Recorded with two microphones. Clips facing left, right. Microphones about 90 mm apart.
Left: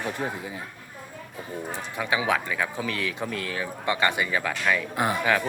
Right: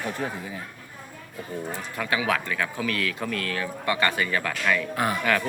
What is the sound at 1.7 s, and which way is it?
A man's voice, 20° left (ahead or behind).